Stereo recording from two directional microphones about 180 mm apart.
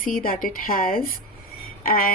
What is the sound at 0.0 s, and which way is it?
Speech, 55° left (ahead or behind).